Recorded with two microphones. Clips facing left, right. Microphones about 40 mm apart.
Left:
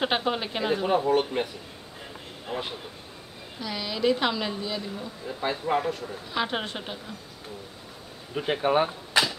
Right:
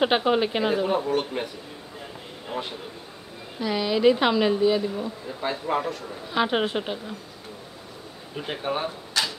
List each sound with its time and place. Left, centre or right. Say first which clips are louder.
0.0 s speech: right 5 dB; centre
0.8 s a man's voice: left 1 dB; centre
3.5 s speech: right 8 dB; centre
5.2 s a man's voice: even; centre
6.3 s speech: right 6 dB; centre
8.4 s speech: left 5 dB; centre
9.1 s a sound: left 3 dB; left